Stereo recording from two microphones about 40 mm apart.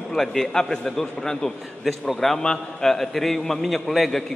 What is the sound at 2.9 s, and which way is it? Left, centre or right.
A man's voice, centre.